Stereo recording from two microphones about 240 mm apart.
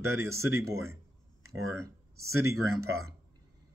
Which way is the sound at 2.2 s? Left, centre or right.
Right.